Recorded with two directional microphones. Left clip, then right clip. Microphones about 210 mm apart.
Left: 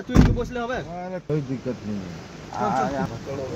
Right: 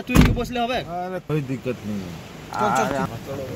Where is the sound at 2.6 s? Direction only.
15° right (ahead or behind).